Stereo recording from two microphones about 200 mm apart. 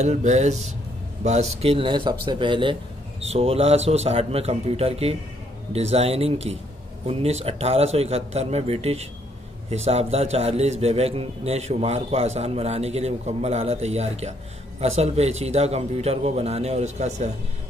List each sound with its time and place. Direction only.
0.0 s a man's voice: 35° right (ahead or behind)